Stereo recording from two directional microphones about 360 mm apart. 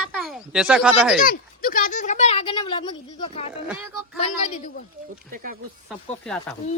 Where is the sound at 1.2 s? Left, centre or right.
Left.